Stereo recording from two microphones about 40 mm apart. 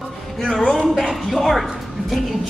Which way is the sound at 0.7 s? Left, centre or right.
Centre.